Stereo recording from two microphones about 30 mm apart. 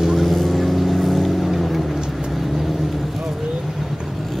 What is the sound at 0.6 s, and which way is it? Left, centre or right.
Vehicle, centre.